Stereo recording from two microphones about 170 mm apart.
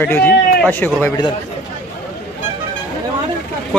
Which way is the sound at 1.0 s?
25° left (ahead or behind).